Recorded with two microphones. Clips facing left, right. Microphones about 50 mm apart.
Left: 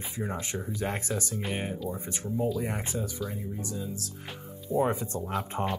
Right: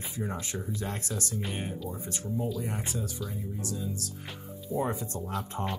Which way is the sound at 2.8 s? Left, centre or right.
Centre.